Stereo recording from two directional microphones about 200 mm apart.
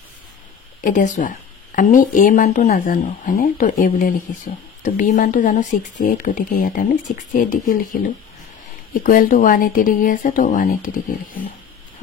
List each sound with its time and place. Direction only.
0.7 s speech: 40° left (ahead or behind)
9.0 s speech: 45° left (ahead or behind)